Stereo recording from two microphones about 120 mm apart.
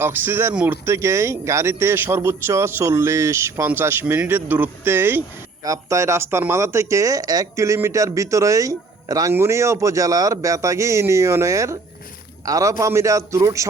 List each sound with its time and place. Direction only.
0.0 s speech: 20° right (ahead or behind)